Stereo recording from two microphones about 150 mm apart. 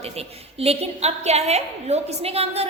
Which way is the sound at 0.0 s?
40° right (ahead or behind).